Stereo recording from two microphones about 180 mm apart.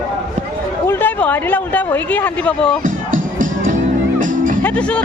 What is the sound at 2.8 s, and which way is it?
Music, 50° right (ahead or behind).